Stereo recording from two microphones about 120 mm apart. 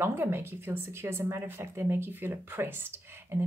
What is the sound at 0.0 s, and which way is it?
A woman's voice, 20° right (ahead or behind).